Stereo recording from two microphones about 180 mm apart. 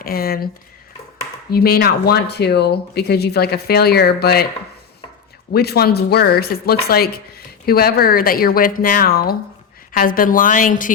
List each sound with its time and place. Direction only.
0.0 s speech: 55° left (ahead or behind)
1.5 s speech: 60° left (ahead or behind)
5.5 s a woman's voice: 60° left (ahead or behind)